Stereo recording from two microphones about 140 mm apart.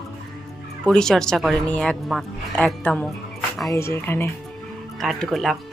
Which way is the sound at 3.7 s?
20° left (ahead or behind).